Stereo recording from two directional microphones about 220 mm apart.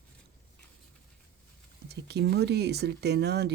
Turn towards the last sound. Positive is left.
turn(degrees=-50)  # may be behind; listen again after turning